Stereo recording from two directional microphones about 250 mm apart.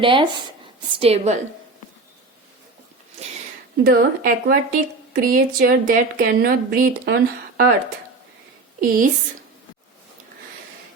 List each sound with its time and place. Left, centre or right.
0.0 s a woman's voice: centre
3.8 s a woman's voice: right
8.8 s a woman's voice: right